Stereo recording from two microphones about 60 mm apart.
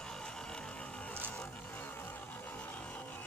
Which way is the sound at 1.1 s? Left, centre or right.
Left.